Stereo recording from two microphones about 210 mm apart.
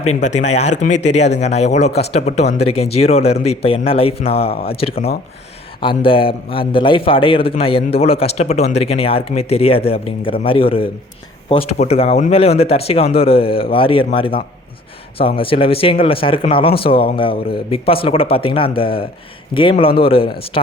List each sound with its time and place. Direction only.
0.2 s a man's voice: 35° left (ahead or behind)